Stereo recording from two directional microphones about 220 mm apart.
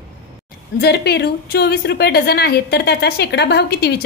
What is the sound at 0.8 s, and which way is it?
A woman's voice, 45° left (ahead or behind).